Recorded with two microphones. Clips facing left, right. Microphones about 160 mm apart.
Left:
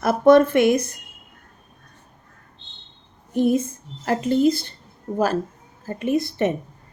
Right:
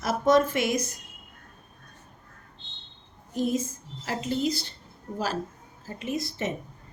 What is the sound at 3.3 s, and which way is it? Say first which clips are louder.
Speech: left 8 dB; 60° left (ahead or behind).